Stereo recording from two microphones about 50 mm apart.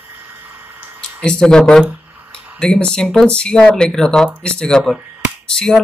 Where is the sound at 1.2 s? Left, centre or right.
Centre.